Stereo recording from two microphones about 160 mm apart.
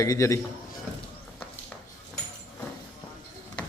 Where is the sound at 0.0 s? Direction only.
20° left (ahead or behind).